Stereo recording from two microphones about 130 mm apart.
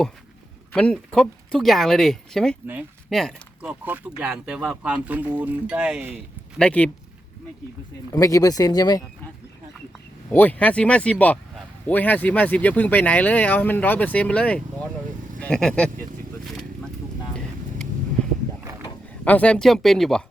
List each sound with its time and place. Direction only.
0.7 s speech: 10° left (ahead or behind)
3.6 s speech: 10° right (ahead or behind)
6.6 s speech: 10° left (ahead or behind)
8.1 s speech: 25° left (ahead or behind)
10.3 s speech: 10° left (ahead or behind)
16.4 s vehicle: centre (ahead or behind)
19.2 s speech: 10° left (ahead or behind)